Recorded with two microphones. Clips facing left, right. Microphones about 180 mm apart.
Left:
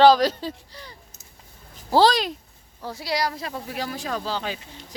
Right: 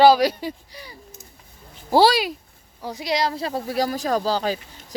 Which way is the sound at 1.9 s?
10° right (ahead or behind).